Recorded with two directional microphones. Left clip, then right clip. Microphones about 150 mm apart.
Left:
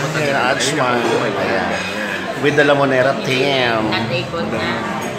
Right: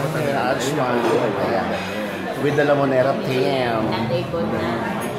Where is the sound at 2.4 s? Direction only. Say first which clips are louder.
Left 5 dB; 20° left (ahead or behind).